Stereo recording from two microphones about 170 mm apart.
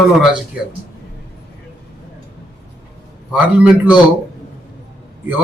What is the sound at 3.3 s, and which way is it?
Speech, 5° right (ahead or behind).